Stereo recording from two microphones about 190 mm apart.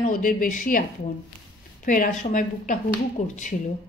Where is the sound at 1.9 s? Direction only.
45° left (ahead or behind).